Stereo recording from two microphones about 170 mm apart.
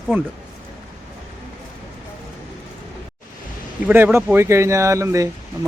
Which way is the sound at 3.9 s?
10° right (ahead or behind).